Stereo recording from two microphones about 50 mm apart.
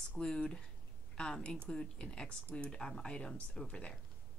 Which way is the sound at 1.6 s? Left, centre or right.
Centre.